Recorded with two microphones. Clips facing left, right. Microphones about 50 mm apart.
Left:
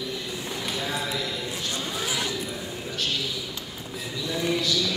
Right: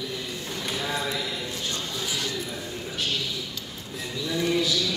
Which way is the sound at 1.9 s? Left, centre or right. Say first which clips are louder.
Left 2 dB; left.